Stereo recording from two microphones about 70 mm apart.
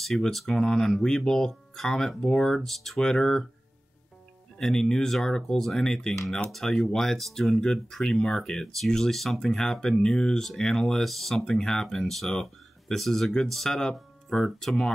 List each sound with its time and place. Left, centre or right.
0.0 s speech: centre
4.6 s speech: centre